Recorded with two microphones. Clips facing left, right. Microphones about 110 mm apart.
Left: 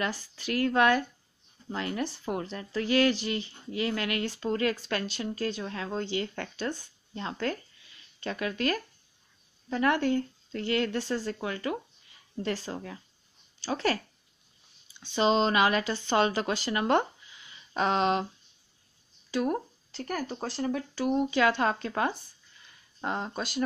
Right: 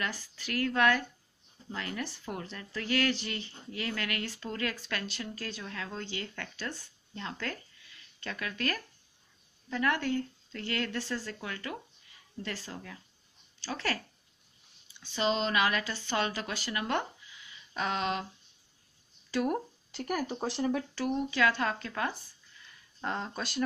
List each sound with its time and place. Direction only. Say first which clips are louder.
0.0 s speech: left 5 dB; 25° left (ahead or behind)
15.0 s speech: left 6 dB; 25° left (ahead or behind)
19.3 s speech: left 2 dB; 5° right (ahead or behind)
21.0 s speech: left 5 dB; 20° left (ahead or behind)
23.0 s speech: left 3 dB; 10° left (ahead or behind)